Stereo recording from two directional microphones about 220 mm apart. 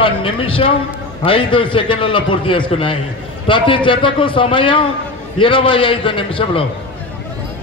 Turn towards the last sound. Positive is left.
turn(degrees=25)  # may be behind; listen again after turning